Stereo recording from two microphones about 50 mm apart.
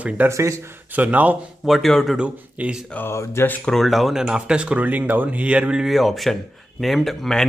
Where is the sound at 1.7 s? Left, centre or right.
Centre.